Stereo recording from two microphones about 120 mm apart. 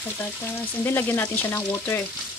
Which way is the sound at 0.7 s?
15° left (ahead or behind).